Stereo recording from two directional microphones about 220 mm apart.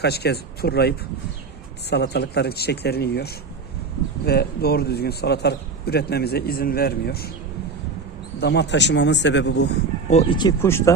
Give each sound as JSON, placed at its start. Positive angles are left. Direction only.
{"t": 0.0, "sound": "a man's voice", "side_deg": 45}
{"t": 8.4, "sound": "a man's voice", "side_deg": 50}
{"t": 10.1, "sound": "speech", "side_deg": 25}